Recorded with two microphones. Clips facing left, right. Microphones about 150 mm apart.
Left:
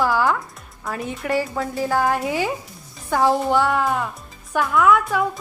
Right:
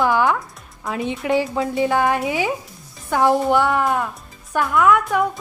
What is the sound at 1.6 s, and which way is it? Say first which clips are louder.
Speech: right 2 dB; centre (ahead or behind).